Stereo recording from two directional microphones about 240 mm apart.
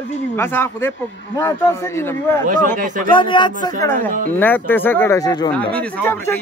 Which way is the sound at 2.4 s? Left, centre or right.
Right.